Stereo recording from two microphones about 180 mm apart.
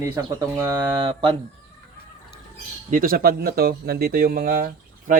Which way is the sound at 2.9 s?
55° right (ahead or behind).